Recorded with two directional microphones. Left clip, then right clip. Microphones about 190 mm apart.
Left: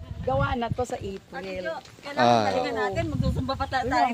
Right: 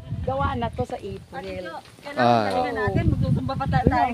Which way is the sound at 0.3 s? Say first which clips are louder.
Right 1 dB; 25° left (ahead or behind).